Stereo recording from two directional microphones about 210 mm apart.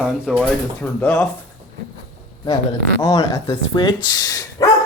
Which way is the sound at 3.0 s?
20° left (ahead or behind).